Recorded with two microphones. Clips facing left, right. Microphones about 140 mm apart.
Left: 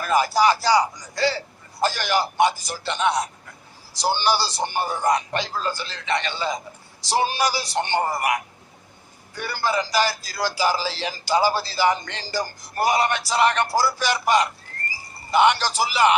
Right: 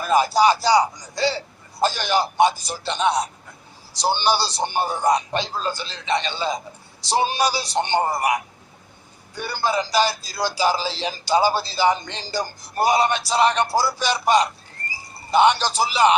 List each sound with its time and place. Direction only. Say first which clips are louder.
0.0 s speech: right 2 dB; 20° right (ahead or behind)